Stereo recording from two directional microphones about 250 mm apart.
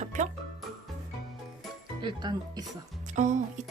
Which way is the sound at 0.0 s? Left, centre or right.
Right.